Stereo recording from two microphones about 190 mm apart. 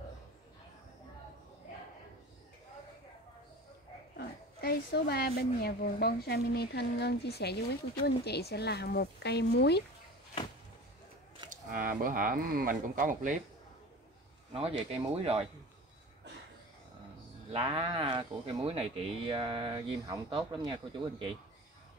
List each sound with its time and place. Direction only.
4.2 s speech: 60° left (ahead or behind)
11.5 s speech: 45° right (ahead or behind)
14.5 s speech: 30° right (ahead or behind)
17.5 s speech: 30° right (ahead or behind)